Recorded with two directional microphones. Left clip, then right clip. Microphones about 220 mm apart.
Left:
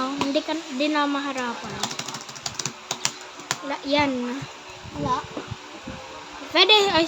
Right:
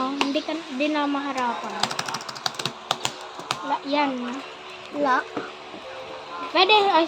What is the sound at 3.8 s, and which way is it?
Speech, 25° left (ahead or behind).